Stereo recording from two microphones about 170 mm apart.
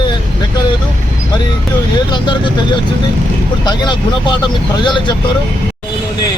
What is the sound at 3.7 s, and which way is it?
Speech, 25° left (ahead or behind).